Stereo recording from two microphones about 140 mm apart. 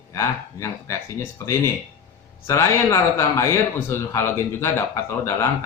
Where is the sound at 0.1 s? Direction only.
20° left (ahead or behind).